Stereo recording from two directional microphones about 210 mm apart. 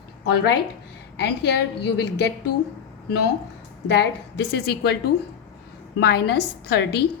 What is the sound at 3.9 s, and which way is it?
A woman's voice, 55° left (ahead or behind).